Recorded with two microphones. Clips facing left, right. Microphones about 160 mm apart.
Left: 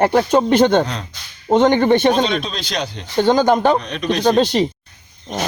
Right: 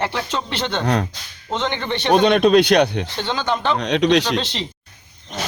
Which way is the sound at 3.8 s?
85° right.